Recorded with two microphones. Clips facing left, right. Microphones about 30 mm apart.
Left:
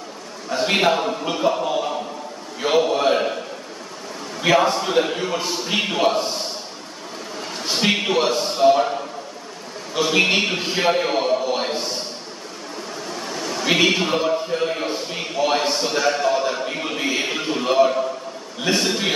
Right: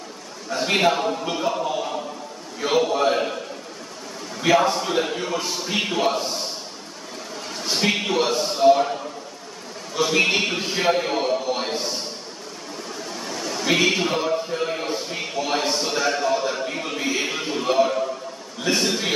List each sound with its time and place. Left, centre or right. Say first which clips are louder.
0.5 s a man's voice: left 2 dB; centre
4.4 s a man's voice: left 1 dB; centre
7.5 s a sound: left 2 dB; left
8.4 s a man's voice: right 1 dB; centre
13.1 s a man's voice: left 2 dB; centre